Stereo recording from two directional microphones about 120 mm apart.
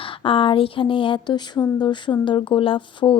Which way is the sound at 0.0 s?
45° left (ahead or behind).